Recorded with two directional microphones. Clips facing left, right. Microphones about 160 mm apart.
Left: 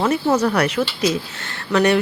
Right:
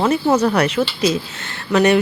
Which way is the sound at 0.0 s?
25° right (ahead or behind).